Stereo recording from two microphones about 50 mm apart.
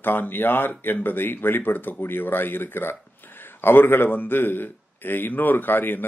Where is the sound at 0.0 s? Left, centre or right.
Left.